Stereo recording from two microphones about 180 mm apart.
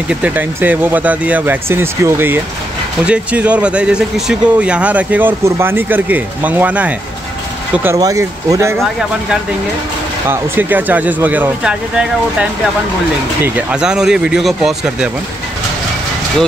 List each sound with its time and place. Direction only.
0.1 s speech: 10° right (ahead or behind)
10.2 s speech: 10° right (ahead or behind)